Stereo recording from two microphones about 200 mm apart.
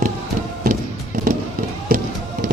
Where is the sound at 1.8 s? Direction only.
45° right (ahead or behind).